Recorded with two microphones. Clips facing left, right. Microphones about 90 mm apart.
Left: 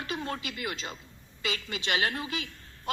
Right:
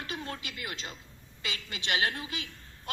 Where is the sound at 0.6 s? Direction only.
25° left (ahead or behind).